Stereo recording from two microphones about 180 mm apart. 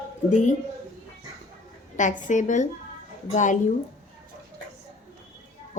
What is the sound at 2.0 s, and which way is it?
A woman's voice, 45° left (ahead or behind).